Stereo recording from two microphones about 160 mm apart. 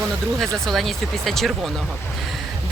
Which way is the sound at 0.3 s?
Centre (ahead or behind).